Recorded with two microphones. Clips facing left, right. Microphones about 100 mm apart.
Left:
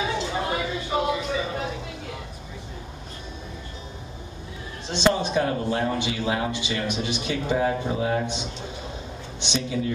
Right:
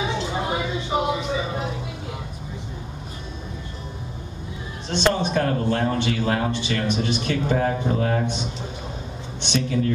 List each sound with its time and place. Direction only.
0.0 s speech: 20° right (ahead or behind)
4.9 s speech: 10° left (ahead or behind)
9.5 s speech: 10° left (ahead or behind)